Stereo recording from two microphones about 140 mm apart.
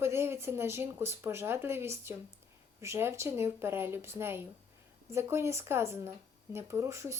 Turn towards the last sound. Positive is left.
turn(degrees=-20)  # may be behind; listen again after turning